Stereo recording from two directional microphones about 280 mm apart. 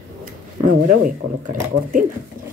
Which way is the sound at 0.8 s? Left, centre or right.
Right.